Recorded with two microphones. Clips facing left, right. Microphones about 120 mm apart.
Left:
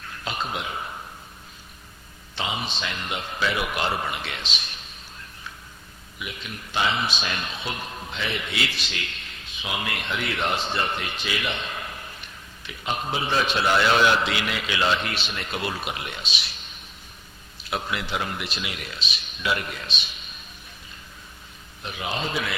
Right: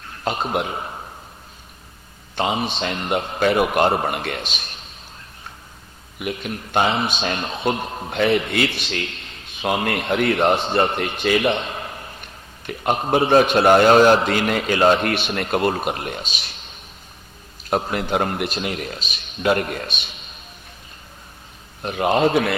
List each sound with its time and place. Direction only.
0.3 s a man's voice: 45° right (ahead or behind)
2.3 s a man's voice: 50° right (ahead or behind)
3.1 s a man's voice: 40° right (ahead or behind)
6.1 s a man's voice: 50° right (ahead or behind)
7.3 s speech: 30° right (ahead or behind)
8.1 s a man's voice: 55° right (ahead or behind)
9.5 s a sound: 55° right (ahead or behind)
9.7 s a man's voice: 45° right (ahead or behind)
11.6 s a sound: 35° right (ahead or behind)
12.2 s a man's voice: 50° right (ahead or behind)
17.6 s a man's voice: 45° right (ahead or behind)
21.8 s a man's voice: 50° right (ahead or behind)